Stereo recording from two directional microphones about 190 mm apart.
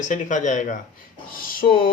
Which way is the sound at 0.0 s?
40° left (ahead or behind).